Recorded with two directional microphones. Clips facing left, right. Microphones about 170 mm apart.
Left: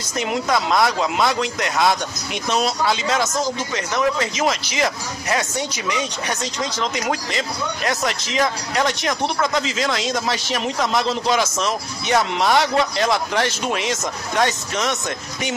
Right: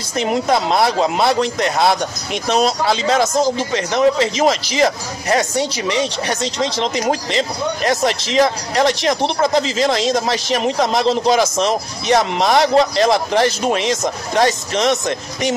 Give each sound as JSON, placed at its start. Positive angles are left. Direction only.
{"t": 0.2, "sound": "speech", "side_deg": -30}